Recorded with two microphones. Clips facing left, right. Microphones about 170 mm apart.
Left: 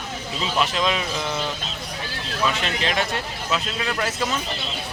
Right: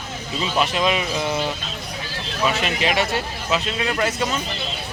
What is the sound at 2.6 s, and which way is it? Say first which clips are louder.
A man's voice: right 3 dB; 5° right (ahead or behind).